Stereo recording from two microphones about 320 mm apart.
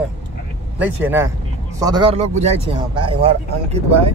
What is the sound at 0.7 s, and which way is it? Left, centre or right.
A man's voice, centre.